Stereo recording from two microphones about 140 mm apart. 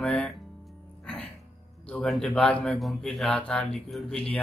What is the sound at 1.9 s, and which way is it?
Speech, 5° left (ahead or behind).